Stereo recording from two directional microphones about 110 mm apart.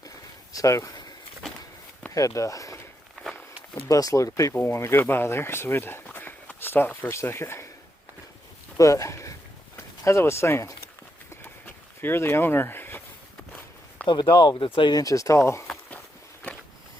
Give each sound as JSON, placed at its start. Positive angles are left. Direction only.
{"t": 0.5, "sound": "speech", "side_deg": 30}
{"t": 2.1, "sound": "speech", "side_deg": 30}
{"t": 3.8, "sound": "speech", "side_deg": 30}
{"t": 8.8, "sound": "speech", "side_deg": 30}
{"t": 11.4, "sound": "a sound", "side_deg": 20}
{"t": 14.1, "sound": "speech", "side_deg": 40}